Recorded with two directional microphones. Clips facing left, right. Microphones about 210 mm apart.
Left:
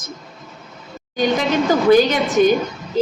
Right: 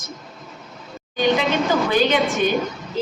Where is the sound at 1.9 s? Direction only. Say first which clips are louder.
Left 5 dB; 40° left (ahead or behind).